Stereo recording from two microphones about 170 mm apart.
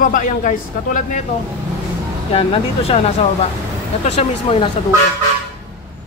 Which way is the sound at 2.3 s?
35° left (ahead or behind).